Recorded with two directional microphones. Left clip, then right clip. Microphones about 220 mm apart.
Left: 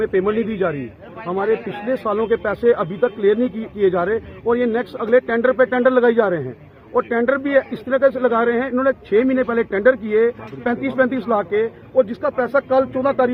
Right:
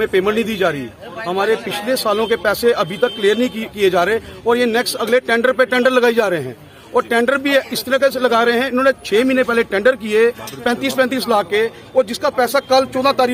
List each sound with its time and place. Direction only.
0.0 s speech: 15° right (ahead or behind)